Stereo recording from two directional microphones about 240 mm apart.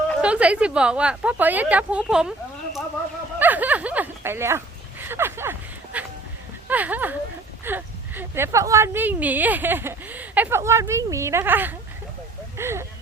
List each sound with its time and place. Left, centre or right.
0.2 s speech: centre
3.3 s a sound: centre
7.6 s speech: centre